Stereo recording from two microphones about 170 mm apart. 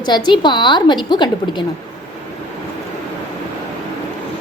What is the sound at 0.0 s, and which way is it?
A woman's voice, 25° left (ahead or behind).